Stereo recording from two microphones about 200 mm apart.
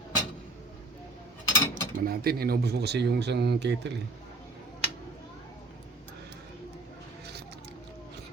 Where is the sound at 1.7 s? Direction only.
50° right (ahead or behind).